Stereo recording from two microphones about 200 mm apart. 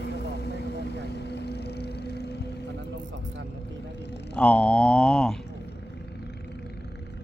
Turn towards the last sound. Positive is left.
turn(degrees=5)  # may be behind; listen again after turning